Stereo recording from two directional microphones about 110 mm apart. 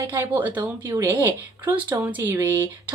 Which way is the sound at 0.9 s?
30° right (ahead or behind).